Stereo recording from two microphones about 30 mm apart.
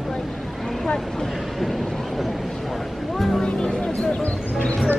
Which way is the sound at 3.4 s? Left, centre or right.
Left.